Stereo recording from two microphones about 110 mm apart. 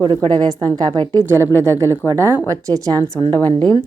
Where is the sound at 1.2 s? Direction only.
20° right (ahead or behind).